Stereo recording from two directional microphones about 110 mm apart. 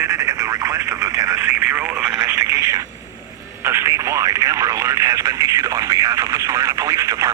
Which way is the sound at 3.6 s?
25° right (ahead or behind).